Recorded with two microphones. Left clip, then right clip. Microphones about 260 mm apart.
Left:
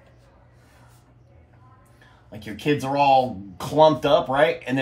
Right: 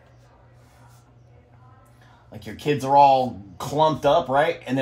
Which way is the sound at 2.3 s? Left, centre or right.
Centre.